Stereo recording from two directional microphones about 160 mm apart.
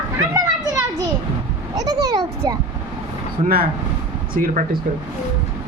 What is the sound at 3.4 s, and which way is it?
Speech, 65° right (ahead or behind).